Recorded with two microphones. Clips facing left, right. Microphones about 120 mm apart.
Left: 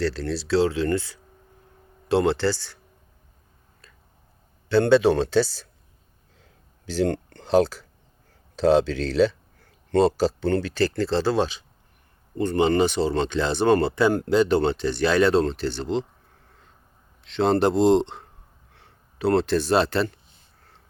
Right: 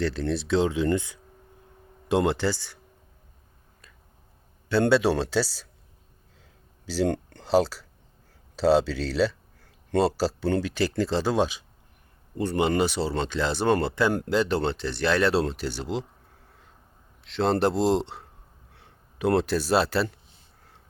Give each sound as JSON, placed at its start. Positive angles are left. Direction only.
{"t": 0.0, "sound": "speech", "side_deg": -20}
{"t": 4.7, "sound": "speech", "side_deg": -10}
{"t": 6.8, "sound": "speech", "side_deg": -10}
{"t": 17.2, "sound": "speech", "side_deg": 0}